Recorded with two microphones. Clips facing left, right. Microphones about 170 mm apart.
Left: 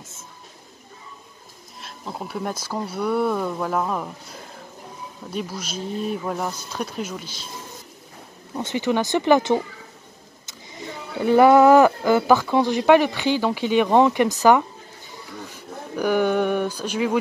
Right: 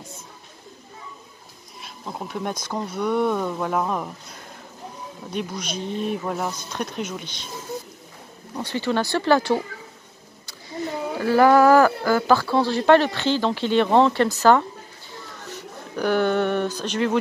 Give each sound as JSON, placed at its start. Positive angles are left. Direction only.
{"t": 1.8, "sound": "speech", "side_deg": 0}
{"t": 5.3, "sound": "speech", "side_deg": 5}
{"t": 6.5, "sound": "speech", "side_deg": 10}
{"t": 8.6, "sound": "speech", "side_deg": 15}
{"t": 11.1, "sound": "speech", "side_deg": 20}
{"t": 15.4, "sound": "speech", "side_deg": 10}